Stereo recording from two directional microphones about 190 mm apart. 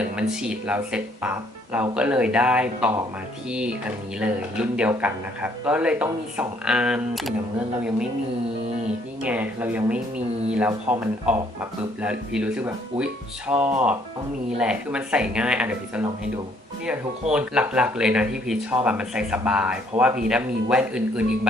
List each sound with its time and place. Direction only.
0.0 s speech: 5° right (ahead or behind)
9.2 s speech: 10° right (ahead or behind)
17.3 s speech: 5° right (ahead or behind)